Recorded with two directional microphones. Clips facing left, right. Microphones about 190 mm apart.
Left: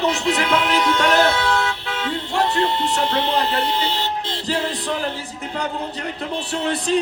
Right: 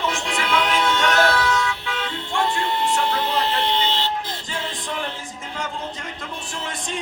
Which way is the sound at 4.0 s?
30° left (ahead or behind).